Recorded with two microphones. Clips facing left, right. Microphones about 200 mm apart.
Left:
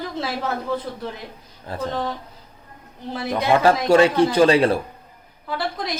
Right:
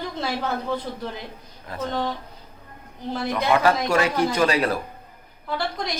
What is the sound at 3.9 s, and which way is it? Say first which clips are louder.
Speech: left 6 dB; 30° left (ahead or behind).